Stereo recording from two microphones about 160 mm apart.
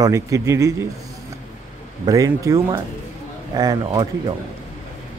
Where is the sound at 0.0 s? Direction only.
20° right (ahead or behind).